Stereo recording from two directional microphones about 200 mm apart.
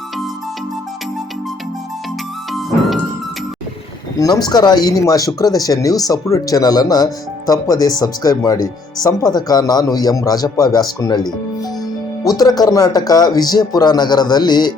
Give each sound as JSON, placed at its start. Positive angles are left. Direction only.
{"t": 2.5, "sound": "music", "side_deg": 0}
{"t": 4.2, "sound": "speech", "side_deg": 20}